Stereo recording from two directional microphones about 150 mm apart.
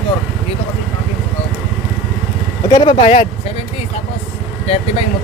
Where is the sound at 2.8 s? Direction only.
40° left (ahead or behind).